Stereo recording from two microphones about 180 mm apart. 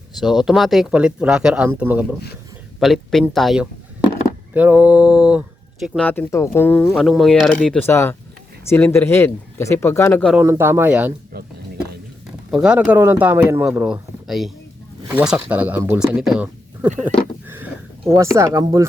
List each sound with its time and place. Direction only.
0.2 s speech: centre (ahead or behind)
6.0 s speech: 10° left (ahead or behind)
10.3 s a man's voice: 15° right (ahead or behind)
12.5 s a man's voice: 5° right (ahead or behind)
17.4 s a sound: 10° right (ahead or behind)
18.1 s a man's voice: 15° right (ahead or behind)